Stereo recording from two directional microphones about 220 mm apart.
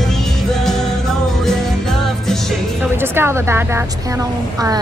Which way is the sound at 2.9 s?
10° right (ahead or behind).